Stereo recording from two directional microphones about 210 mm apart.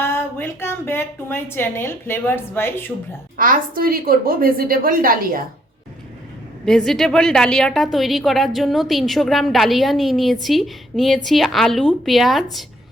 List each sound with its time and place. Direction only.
0.0 s a woman's voice: 10° left (ahead or behind)
3.3 s a woman's voice: 40° right (ahead or behind)
6.7 s a woman's voice: centre (ahead or behind)